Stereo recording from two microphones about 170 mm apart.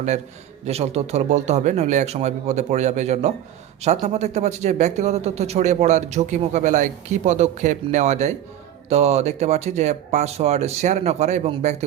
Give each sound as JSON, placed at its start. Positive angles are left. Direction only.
{"t": 0.6, "sound": "speech", "side_deg": -40}